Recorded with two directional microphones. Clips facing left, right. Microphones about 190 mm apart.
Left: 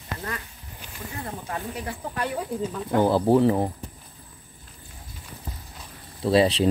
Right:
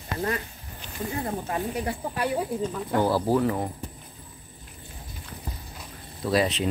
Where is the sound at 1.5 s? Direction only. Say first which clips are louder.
Right 2 dB; 15° right (ahead or behind).